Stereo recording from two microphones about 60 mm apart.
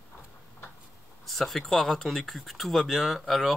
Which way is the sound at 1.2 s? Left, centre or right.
Centre.